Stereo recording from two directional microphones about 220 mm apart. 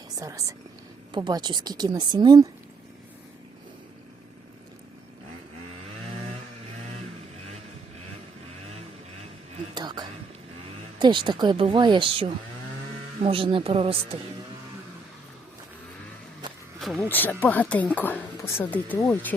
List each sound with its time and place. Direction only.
0.2 s a woman's voice: 15° right (ahead or behind)
9.7 s whispering: 20° right (ahead or behind)
11.0 s a woman's voice: 20° right (ahead or behind)
17.1 s speech: 10° left (ahead or behind)